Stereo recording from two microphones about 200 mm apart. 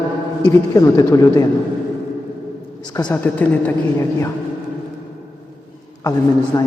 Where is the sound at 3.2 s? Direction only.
5° left (ahead or behind).